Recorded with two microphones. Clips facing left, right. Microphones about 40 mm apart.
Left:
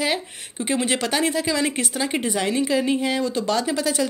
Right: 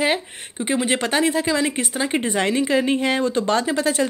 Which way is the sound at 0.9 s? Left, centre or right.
Right.